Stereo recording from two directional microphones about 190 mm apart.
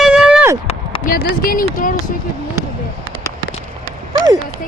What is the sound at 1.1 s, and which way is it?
Speech, 50° left (ahead or behind).